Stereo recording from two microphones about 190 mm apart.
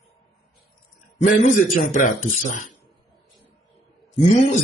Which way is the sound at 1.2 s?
40° left (ahead or behind).